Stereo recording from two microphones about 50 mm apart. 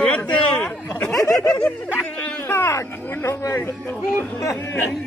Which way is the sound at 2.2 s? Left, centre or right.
Left.